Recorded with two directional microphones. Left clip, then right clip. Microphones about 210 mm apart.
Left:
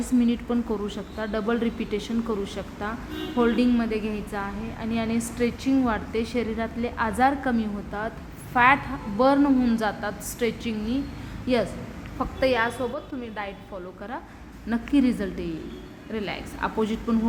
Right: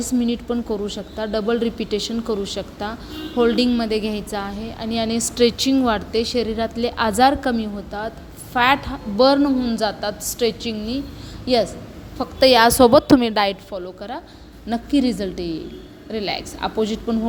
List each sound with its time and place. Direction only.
0.3 s a woman's voice: 10° right (ahead or behind)
7.6 s a woman's voice: 15° right (ahead or behind)
9.6 s speech: 10° right (ahead or behind)
12.4 s a woman's voice: 35° right (ahead or behind)
13.7 s a woman's voice: 20° right (ahead or behind)